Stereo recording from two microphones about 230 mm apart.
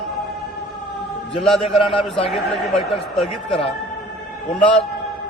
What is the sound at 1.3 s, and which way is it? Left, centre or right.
Speech, centre.